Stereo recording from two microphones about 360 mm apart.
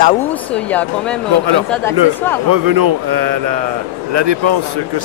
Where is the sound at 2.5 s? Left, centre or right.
Right.